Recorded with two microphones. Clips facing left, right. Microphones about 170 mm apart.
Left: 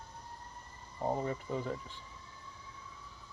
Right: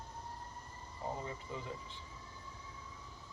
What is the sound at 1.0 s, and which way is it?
Speech, 45° left (ahead or behind).